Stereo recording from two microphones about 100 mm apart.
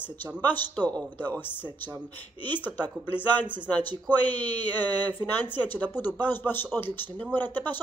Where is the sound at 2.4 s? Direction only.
20° left (ahead or behind).